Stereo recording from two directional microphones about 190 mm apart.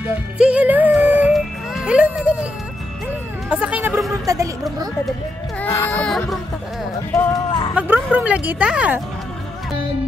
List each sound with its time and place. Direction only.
0.4 s music: 5° right (ahead or behind)
3.4 s a woman's voice: 5° right (ahead or behind)
5.6 s speech: 10° left (ahead or behind)
7.4 s a sound: 25° left (ahead or behind)
7.7 s speech: 10° right (ahead or behind)